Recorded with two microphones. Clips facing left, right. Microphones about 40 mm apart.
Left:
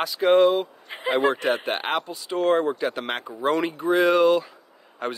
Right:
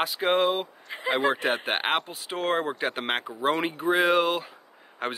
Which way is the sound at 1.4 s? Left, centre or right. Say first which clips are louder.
Left 2 dB; right.